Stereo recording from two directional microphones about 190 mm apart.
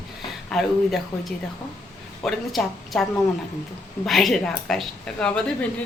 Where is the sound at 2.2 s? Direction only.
Centre (ahead or behind).